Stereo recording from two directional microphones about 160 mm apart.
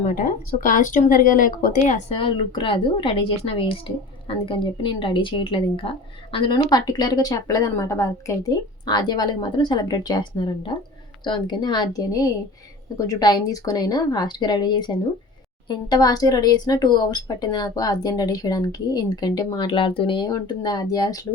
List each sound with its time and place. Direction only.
0.0 s speech: 55° left (ahead or behind)
2.0 s a woman's voice: 35° left (ahead or behind)